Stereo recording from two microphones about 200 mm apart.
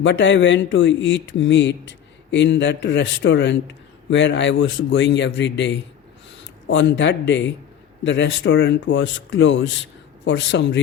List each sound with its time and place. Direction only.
0.0 s speech: 65° left (ahead or behind)